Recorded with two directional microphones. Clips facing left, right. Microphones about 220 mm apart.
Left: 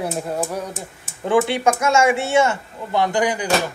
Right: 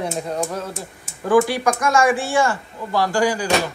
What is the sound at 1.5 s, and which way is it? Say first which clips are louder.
Speech: left 1 dB; 25° left (ahead or behind).